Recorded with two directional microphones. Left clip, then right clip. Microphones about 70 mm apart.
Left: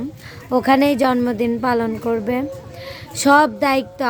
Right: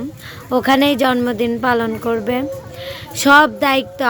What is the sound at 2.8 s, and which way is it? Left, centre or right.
A woman's voice, left.